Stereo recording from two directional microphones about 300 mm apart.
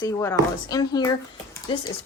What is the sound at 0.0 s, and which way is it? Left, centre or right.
Speech, centre.